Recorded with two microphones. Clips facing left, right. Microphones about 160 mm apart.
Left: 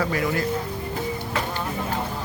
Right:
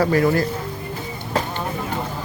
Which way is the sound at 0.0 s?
40° right (ahead or behind).